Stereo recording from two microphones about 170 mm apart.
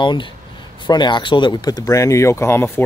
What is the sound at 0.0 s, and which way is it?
Speech, 25° left (ahead or behind).